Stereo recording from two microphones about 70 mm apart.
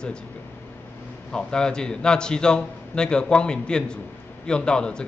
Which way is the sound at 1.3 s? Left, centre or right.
Centre.